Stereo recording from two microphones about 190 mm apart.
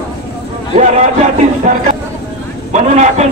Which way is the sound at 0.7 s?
35° right (ahead or behind).